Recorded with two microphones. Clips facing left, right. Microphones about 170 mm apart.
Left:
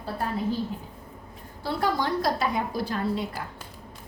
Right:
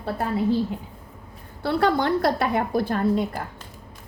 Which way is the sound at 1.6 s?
65° right (ahead or behind).